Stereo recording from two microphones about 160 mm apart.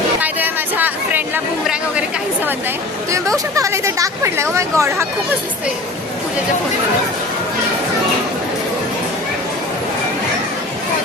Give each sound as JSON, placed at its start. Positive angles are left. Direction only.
{"t": 0.2, "sound": "a sound", "side_deg": -10}
{"t": 1.6, "sound": "chatter", "side_deg": -5}
{"t": 3.1, "sound": "speech", "side_deg": -20}